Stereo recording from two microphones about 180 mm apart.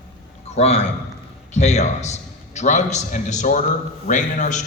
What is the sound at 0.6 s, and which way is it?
A man's voice, 35° left (ahead or behind).